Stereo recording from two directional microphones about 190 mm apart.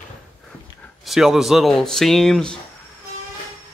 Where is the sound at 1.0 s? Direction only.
Centre (ahead or behind).